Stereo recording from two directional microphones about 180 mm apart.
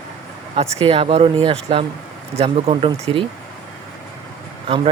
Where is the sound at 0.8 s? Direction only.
30° right (ahead or behind).